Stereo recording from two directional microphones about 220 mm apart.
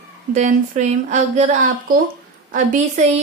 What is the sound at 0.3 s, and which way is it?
Speech, 35° right (ahead or behind).